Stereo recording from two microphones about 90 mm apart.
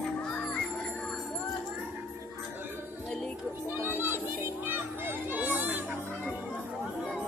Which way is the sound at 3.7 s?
25° right (ahead or behind).